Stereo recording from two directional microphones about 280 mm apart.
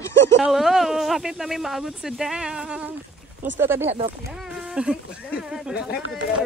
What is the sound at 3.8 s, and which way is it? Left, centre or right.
Speech, right.